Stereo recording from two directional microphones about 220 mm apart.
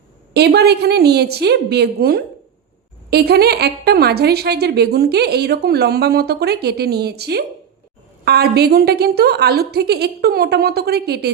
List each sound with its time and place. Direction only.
0.3 s a woman's voice: 45° right (ahead or behind)